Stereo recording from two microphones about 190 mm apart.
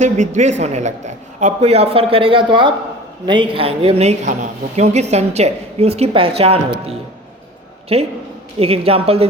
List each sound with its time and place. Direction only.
0.0 s a woman's voice: 40° right (ahead or behind)